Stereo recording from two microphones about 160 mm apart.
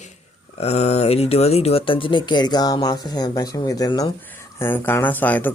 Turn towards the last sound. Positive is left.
turn(degrees=10)  # may be behind; listen again after turning